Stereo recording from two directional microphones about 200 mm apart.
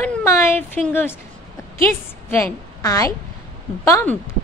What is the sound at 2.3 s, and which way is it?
A woman's voice, 15° left (ahead or behind).